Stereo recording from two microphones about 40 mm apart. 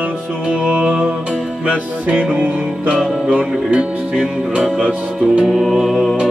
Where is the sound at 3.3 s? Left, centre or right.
Right.